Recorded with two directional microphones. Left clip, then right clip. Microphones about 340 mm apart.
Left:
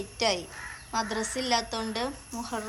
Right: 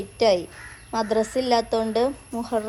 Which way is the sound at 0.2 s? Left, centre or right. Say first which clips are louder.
Right 8 dB; centre.